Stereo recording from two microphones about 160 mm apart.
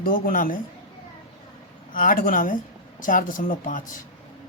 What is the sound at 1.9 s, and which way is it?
Speech, 60° left (ahead or behind).